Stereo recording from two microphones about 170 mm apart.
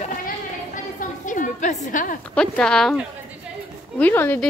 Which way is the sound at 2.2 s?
5° left (ahead or behind).